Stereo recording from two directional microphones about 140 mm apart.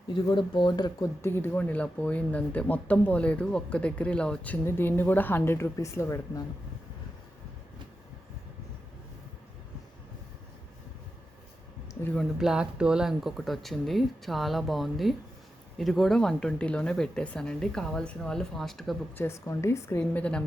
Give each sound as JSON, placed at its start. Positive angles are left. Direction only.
{"t": 0.1, "sound": "speech", "side_deg": 35}
{"t": 12.4, "sound": "speech", "side_deg": -5}
{"t": 19.1, "sound": "speech", "side_deg": 15}